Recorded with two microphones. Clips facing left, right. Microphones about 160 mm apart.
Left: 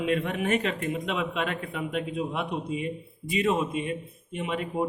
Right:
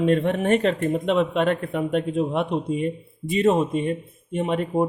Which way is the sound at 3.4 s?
40° right (ahead or behind).